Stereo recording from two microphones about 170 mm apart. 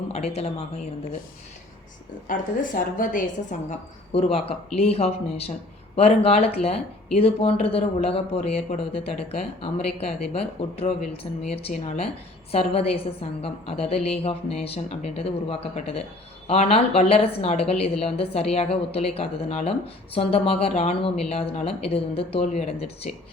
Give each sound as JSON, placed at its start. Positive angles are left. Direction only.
{"t": 0.1, "sound": "speech", "side_deg": 40}
{"t": 2.2, "sound": "a woman's voice", "side_deg": 55}
{"t": 3.7, "sound": "a woman's voice", "side_deg": 35}